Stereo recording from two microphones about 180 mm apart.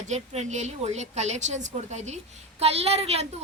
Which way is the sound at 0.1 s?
40° right (ahead or behind).